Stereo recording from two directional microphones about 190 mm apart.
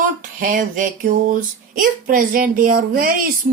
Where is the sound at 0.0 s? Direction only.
45° right (ahead or behind).